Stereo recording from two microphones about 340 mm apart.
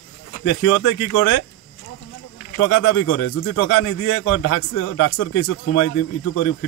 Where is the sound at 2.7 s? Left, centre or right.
Left.